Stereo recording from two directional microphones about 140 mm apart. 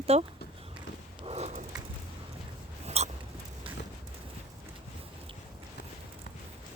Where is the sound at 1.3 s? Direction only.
50° right (ahead or behind).